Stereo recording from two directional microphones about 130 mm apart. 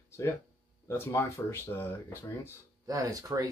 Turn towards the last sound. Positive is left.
turn(degrees=-25)  # may be behind; listen again after turning